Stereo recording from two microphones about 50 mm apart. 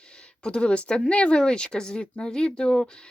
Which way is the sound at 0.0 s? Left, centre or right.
Centre.